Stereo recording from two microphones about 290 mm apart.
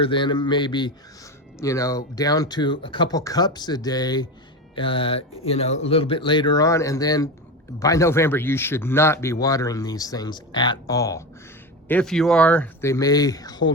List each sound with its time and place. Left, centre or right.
0.0 s speech: centre